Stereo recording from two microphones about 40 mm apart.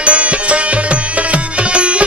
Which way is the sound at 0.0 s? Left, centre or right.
Right.